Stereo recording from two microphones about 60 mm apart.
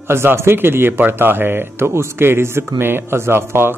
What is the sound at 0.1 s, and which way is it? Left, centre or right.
A man's voice, right.